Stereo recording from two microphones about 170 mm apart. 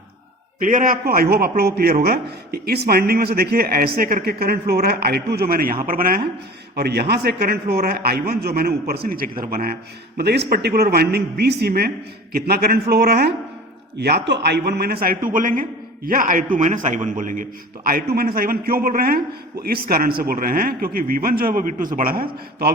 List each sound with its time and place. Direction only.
0.6 s speech: 50° right (ahead or behind)
6.7 s a man's voice: 70° right (ahead or behind)
10.2 s a man's voice: 75° right (ahead or behind); by 17.4 s 50° right (ahead or behind)
17.8 s speech: 60° right (ahead or behind)